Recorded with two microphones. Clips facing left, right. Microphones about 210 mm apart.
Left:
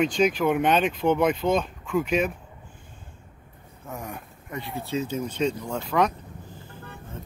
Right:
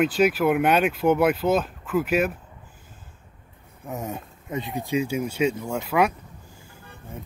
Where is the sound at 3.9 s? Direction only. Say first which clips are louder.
Right 4 dB; 20° right (ahead or behind).